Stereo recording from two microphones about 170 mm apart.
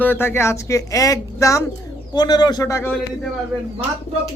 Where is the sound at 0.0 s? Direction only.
15° left (ahead or behind).